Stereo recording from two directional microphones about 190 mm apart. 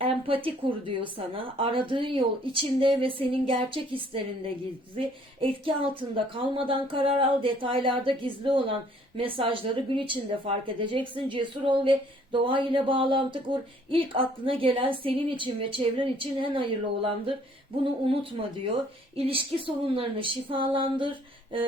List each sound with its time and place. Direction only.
0.4 s a woman's voice: 25° right (ahead or behind)